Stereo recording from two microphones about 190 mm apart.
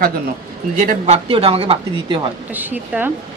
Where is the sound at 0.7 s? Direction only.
40° right (ahead or behind).